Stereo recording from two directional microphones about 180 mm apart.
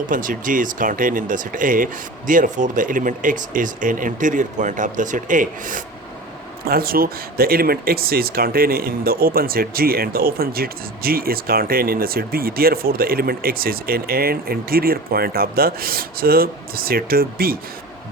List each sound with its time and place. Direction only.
0.1 s speech: 50° right (ahead or behind)